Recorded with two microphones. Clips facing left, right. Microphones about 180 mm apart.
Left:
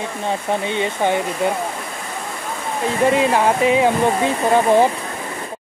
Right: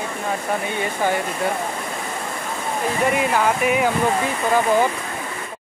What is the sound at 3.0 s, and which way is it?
Speech, 25° left (ahead or behind).